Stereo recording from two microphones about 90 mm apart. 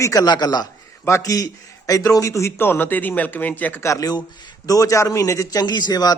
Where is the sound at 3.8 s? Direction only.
40° left (ahead or behind).